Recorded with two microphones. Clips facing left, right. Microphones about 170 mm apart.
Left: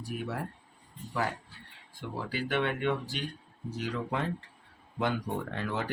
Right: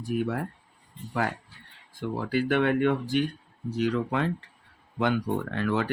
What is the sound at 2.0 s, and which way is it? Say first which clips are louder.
Speech: right 8 dB; 50° right (ahead or behind).